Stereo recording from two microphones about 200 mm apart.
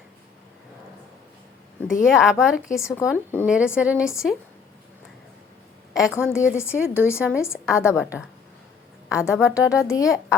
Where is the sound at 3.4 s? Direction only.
5° right (ahead or behind).